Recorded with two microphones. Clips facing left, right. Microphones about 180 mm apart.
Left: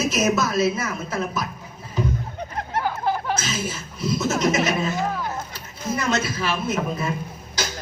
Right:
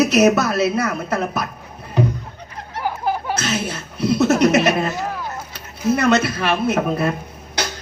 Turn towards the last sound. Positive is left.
turn(degrees=-65)  # may be behind; listen again after turning